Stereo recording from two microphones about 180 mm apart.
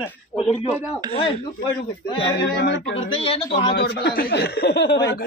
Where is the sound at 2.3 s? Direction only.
75° left (ahead or behind).